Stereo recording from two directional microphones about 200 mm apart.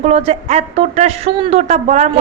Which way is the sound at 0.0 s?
30° right (ahead or behind).